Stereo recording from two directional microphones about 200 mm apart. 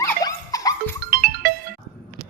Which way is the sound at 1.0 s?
45° right (ahead or behind).